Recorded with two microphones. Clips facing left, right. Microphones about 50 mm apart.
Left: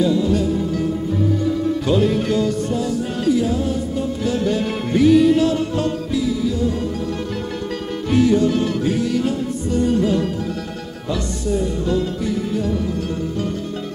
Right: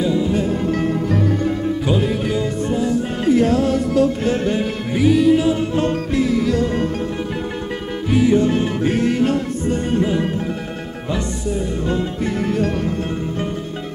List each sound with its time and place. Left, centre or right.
0.0 s music: right
1.9 s music: centre
2.4 s music: right
3.3 s music: right
4.2 s music: right
4.9 s music: centre
5.8 s music: right
8.3 s music: right
8.9 s music: right
11.8 s music: right